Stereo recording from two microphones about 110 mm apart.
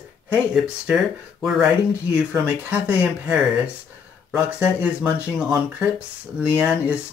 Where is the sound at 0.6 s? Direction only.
5° right (ahead or behind).